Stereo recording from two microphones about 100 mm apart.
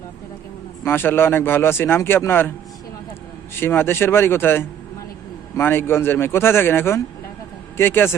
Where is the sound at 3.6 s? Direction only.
20° left (ahead or behind).